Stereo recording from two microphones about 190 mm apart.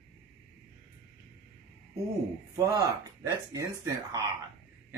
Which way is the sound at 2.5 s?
20° right (ahead or behind).